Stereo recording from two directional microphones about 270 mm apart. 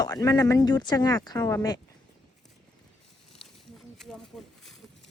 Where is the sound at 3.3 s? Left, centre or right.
Centre.